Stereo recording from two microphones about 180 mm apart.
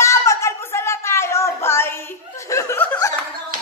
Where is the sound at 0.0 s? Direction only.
15° left (ahead or behind).